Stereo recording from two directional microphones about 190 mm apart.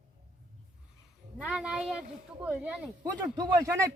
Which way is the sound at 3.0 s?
15° right (ahead or behind).